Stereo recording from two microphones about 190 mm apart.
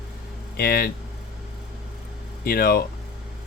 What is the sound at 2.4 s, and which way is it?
Speech, 55° left (ahead or behind).